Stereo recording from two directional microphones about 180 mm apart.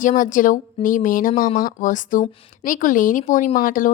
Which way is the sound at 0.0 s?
45° left (ahead or behind).